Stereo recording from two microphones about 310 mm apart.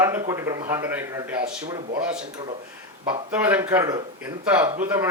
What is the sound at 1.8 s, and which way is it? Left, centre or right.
Speech, right.